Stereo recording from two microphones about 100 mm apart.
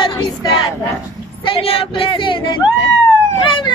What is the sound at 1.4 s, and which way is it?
A child's voice, 70° left (ahead or behind).